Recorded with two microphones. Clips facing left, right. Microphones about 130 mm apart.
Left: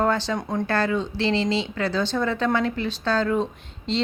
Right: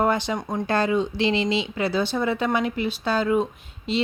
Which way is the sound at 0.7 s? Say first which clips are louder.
Right 3 dB; 15° right (ahead or behind).